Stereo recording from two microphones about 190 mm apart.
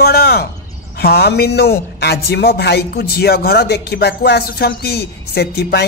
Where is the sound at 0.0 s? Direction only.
55° left (ahead or behind).